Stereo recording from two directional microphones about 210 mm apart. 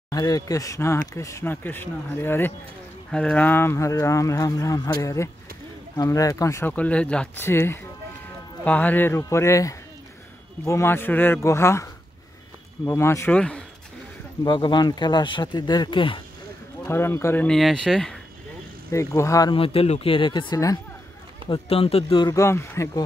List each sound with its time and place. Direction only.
0.1 s speech: 20° left (ahead or behind)
14.4 s speech: 20° left (ahead or behind)
16.8 s speech: 10° left (ahead or behind)
18.9 s speech: 15° left (ahead or behind)